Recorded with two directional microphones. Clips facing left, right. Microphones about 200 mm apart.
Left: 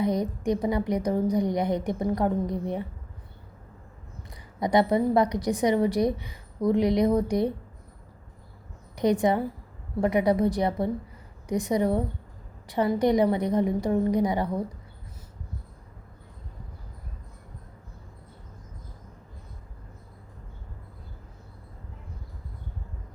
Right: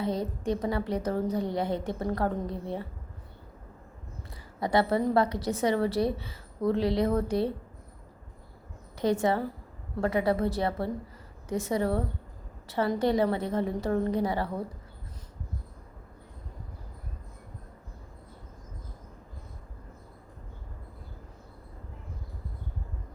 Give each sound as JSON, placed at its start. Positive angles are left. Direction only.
{"t": 0.0, "sound": "a woman's voice", "side_deg": 15}
{"t": 4.6, "sound": "a woman's voice", "side_deg": 15}
{"t": 9.0, "sound": "a woman's voice", "side_deg": 15}